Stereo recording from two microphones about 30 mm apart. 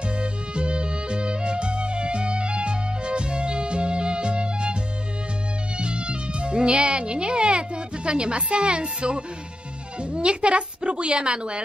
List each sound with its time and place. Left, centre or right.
0.1 s music: right
5.8 s music: right
10.0 s a woman's voice: right